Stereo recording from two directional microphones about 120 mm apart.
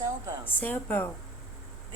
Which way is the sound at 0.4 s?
15° left (ahead or behind).